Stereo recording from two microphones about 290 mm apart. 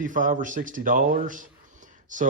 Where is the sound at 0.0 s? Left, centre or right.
Right.